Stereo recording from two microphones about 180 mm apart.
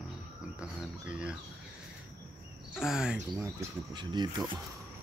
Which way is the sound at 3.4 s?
20° right (ahead or behind).